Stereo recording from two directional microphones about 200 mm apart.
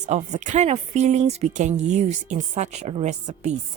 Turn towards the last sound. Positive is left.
turn(degrees=-35)  # may be behind; listen again after turning